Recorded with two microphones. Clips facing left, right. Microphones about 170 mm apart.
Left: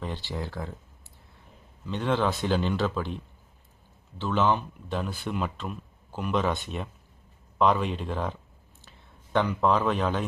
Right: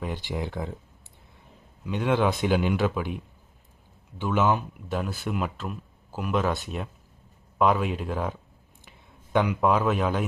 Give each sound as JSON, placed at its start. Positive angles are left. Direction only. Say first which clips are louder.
{"t": 0.0, "sound": "speech", "louder": "right 3 dB", "side_deg": -15}
{"t": 1.8, "sound": "speech", "louder": "right 2 dB", "side_deg": -10}
{"t": 4.2, "sound": "speech", "louder": "right 1 dB", "side_deg": -10}